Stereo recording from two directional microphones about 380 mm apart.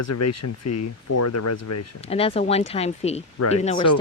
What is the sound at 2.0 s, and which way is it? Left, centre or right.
Speech, centre.